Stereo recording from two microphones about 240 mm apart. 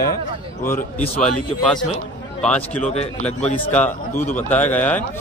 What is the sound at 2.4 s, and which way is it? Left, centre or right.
Speech, centre.